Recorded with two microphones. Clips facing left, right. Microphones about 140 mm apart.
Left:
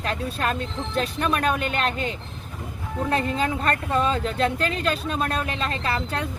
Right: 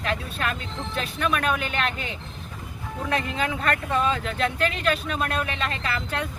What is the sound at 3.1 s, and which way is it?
Speech, 35° left (ahead or behind).